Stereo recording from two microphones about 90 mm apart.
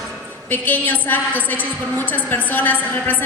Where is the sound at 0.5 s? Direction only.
20° left (ahead or behind).